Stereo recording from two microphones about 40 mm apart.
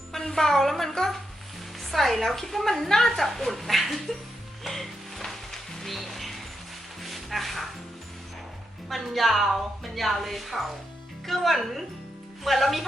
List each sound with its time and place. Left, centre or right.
0.1 s a woman's voice: centre
4.6 s music: centre
7.0 s a sound: centre
8.9 s a woman's voice: centre